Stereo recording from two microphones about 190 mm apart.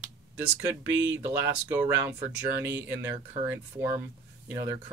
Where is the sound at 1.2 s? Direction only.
10° right (ahead or behind).